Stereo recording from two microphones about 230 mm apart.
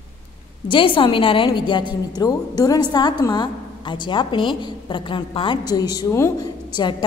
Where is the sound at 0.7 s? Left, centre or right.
Left.